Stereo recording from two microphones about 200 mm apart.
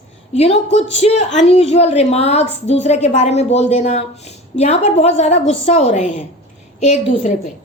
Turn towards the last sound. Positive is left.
turn(degrees=35)  # may be behind; listen again after turning